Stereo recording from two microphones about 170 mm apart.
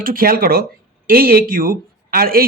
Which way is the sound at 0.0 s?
60° right (ahead or behind).